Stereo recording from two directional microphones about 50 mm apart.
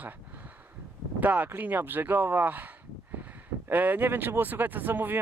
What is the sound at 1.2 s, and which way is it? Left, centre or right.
Speech, right.